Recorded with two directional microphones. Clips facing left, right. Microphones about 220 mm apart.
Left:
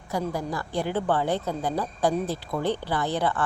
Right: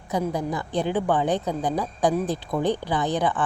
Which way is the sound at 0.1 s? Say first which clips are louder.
Right 3 dB; 20° right (ahead or behind).